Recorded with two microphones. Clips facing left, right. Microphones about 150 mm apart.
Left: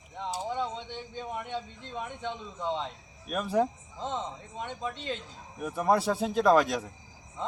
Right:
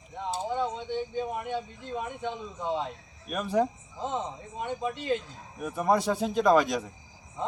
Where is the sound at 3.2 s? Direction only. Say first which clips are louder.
Right 1 dB; centre (ahead or behind).